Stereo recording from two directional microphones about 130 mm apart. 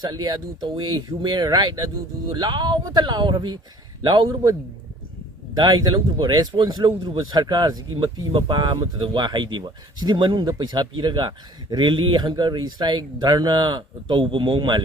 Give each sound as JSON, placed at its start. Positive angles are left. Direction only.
{"t": 0.1, "sound": "a man's voice", "side_deg": -35}
{"t": 5.5, "sound": "a man's voice", "side_deg": -35}